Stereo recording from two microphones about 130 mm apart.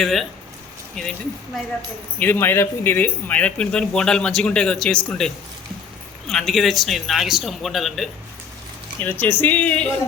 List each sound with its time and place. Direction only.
0.0 s speech: centre (ahead or behind)
2.1 s speech: 15° left (ahead or behind)
9.0 s speech: 15° left (ahead or behind)